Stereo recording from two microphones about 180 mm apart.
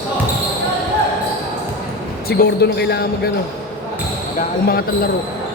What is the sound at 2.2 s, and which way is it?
Speech, 60° left (ahead or behind).